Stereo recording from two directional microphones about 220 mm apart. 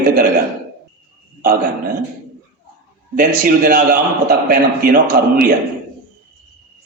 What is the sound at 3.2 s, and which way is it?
A man's voice, 40° right (ahead or behind).